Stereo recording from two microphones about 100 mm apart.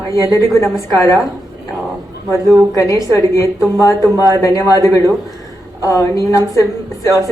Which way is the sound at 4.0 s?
35° right (ahead or behind).